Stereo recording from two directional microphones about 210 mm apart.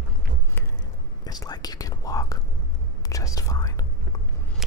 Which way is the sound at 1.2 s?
20° left (ahead or behind).